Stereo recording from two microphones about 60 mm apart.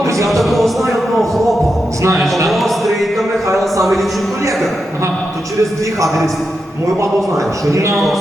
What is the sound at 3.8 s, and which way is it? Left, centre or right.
Music, centre.